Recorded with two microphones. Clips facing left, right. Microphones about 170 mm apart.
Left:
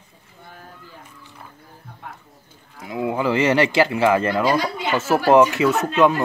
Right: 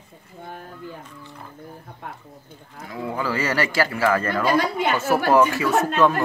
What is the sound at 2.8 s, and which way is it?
Speech, 20° left (ahead or behind).